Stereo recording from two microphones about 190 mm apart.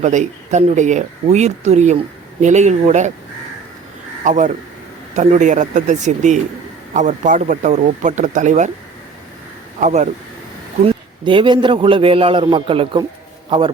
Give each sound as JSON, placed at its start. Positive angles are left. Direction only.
{"t": 0.0, "sound": "speech", "side_deg": -40}
{"t": 4.2, "sound": "speech", "side_deg": -40}
{"t": 9.8, "sound": "speech", "side_deg": -40}
{"t": 10.8, "sound": "a man's voice", "side_deg": -25}